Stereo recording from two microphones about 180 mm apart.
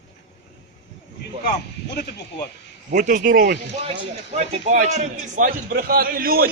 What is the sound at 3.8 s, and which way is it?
A man's voice, 35° right (ahead or behind).